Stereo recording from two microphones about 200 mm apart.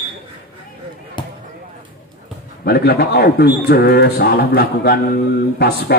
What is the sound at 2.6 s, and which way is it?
A man's voice, 55° left (ahead or behind).